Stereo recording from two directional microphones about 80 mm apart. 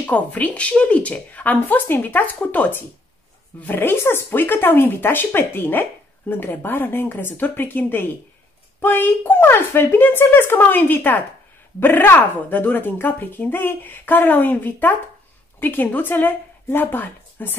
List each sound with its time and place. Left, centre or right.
0.0 s a woman's voice: left